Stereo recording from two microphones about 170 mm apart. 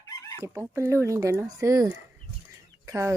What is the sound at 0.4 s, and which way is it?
Speech, 15° right (ahead or behind).